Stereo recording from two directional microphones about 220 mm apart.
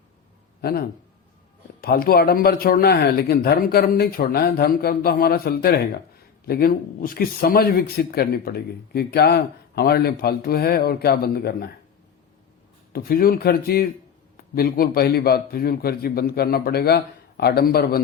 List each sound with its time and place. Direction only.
0.6 s speech: 45° left (ahead or behind)
12.9 s speech: 45° left (ahead or behind)